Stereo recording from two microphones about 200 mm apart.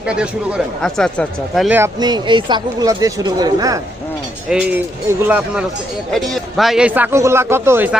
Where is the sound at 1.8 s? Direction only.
20° right (ahead or behind).